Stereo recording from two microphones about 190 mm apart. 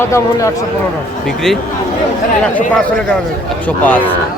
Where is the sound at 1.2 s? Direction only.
Centre (ahead or behind).